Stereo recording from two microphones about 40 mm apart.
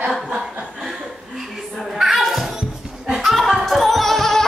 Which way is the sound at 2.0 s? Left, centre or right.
Centre.